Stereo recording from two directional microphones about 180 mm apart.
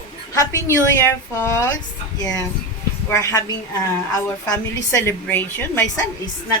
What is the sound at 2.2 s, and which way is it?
A woman's voice, 20° left (ahead or behind).